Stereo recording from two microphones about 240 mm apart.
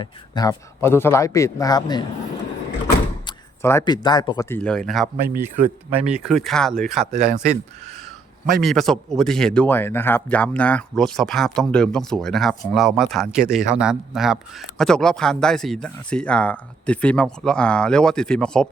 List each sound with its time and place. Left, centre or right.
0.0 s a man's voice: centre
7.1 s speech: right
8.6 s speech: centre